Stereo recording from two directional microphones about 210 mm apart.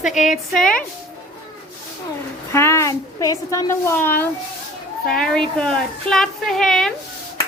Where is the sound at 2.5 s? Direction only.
15° left (ahead or behind).